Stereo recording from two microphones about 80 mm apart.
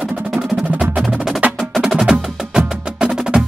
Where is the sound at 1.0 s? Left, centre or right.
Centre.